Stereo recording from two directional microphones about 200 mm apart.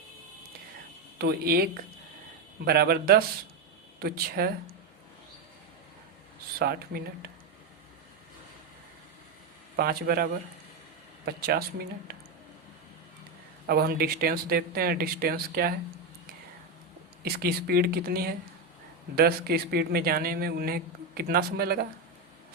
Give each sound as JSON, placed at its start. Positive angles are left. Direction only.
{"t": 1.2, "sound": "speech", "side_deg": -50}
{"t": 6.6, "sound": "speech", "side_deg": -50}
{"t": 9.7, "sound": "speech", "side_deg": -50}
{"t": 11.3, "sound": "speech", "side_deg": -50}
{"t": 12.1, "sound": "squish", "side_deg": -50}
{"t": 13.7, "sound": "speech", "side_deg": -50}
{"t": 17.2, "sound": "speech", "side_deg": -50}